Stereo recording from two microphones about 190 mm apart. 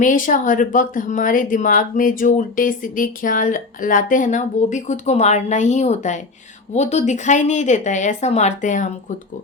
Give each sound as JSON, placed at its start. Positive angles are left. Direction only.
{"t": 0.0, "sound": "a woman's voice", "side_deg": 45}